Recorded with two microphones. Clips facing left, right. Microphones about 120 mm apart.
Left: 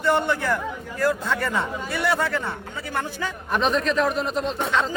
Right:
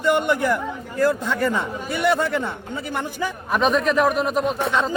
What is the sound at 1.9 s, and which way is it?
Speech, 20° right (ahead or behind).